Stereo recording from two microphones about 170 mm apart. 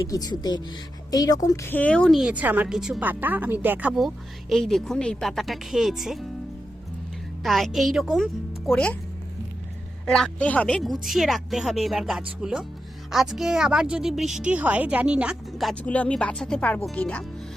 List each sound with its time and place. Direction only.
0.1 s speech: 25° left (ahead or behind); by 6.2 s centre (ahead or behind)
7.4 s speech: centre (ahead or behind)
10.1 s speech: 5° left (ahead or behind)